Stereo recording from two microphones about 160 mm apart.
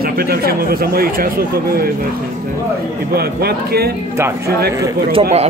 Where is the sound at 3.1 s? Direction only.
75° right (ahead or behind).